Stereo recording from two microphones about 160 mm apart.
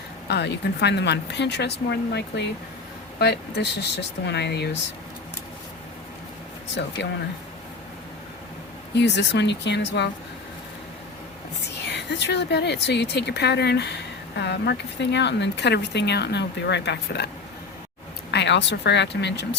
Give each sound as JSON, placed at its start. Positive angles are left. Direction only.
{"t": 0.3, "sound": "speech", "side_deg": 90}
{"t": 6.7, "sound": "speech", "side_deg": 90}
{"t": 9.0, "sound": "speech", "side_deg": 90}
{"t": 11.9, "sound": "speech", "side_deg": 90}
{"t": 18.3, "sound": "speech", "side_deg": 90}